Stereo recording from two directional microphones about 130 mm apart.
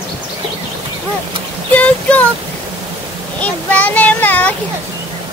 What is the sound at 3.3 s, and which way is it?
A child's voice, 10° left (ahead or behind).